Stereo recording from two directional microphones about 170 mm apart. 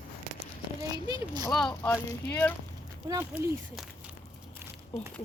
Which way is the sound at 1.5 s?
5° left (ahead or behind).